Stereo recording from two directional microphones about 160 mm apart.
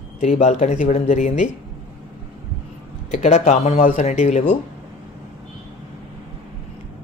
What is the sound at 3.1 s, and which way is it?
Speech, 45° left (ahead or behind).